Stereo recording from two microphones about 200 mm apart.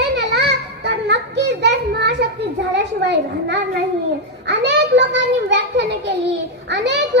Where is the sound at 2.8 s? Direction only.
60° right (ahead or behind).